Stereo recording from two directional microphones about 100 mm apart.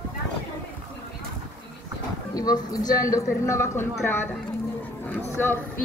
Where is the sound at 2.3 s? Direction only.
40° left (ahead or behind).